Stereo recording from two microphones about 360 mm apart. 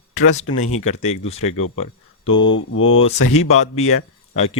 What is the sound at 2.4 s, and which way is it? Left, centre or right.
Mantra, left.